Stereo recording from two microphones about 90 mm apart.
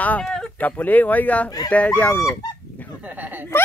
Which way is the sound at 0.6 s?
20° left (ahead or behind).